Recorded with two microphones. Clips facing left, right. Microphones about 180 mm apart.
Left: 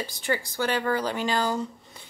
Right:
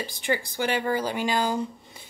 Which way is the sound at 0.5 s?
15° right (ahead or behind).